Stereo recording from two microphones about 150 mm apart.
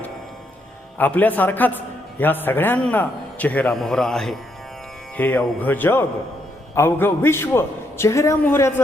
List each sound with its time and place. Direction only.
0.9 s a man's voice: 10° left (ahead or behind)